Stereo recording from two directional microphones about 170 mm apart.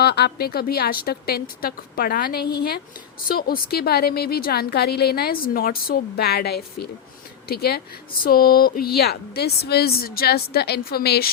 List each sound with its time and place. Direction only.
0.0 s a woman's voice: 70° left (ahead or behind)